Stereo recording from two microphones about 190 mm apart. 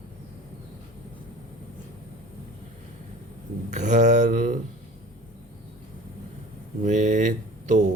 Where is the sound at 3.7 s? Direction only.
40° right (ahead or behind).